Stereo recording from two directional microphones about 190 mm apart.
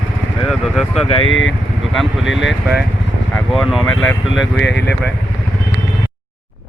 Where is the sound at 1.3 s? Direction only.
85° left.